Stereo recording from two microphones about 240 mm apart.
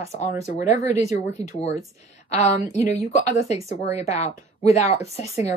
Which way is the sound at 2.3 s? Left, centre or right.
Left.